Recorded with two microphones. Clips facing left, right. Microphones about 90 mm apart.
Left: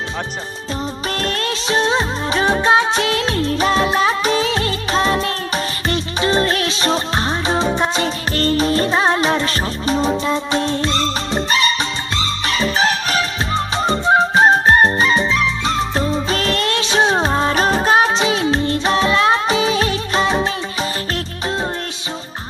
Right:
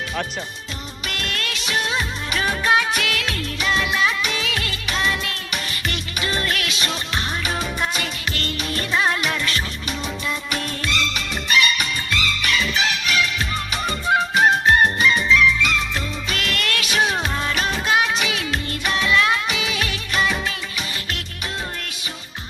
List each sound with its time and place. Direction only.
1.2 s music: 35° left (ahead or behind)